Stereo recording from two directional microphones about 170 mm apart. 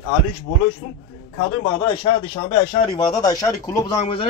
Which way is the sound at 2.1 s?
25° left (ahead or behind).